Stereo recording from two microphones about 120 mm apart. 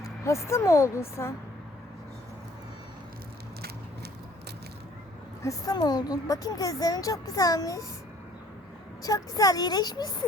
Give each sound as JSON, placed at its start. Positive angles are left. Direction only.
{"t": 0.0, "sound": "a woman's voice", "side_deg": 25}
{"t": 5.4, "sound": "a woman's voice", "side_deg": 30}
{"t": 9.0, "sound": "a woman's voice", "side_deg": 30}